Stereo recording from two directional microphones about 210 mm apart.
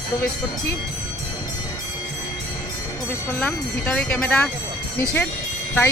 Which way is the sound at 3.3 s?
10° left (ahead or behind).